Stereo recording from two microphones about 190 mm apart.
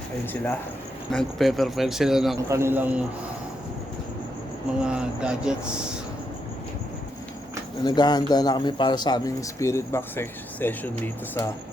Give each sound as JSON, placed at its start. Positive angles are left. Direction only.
{"t": 1.1, "sound": "speech", "side_deg": 0}
{"t": 2.5, "sound": "a man's voice", "side_deg": -15}
{"t": 4.9, "sound": "speech", "side_deg": -5}
{"t": 7.9, "sound": "speech", "side_deg": 20}